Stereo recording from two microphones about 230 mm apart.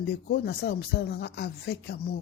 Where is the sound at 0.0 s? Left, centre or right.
Left.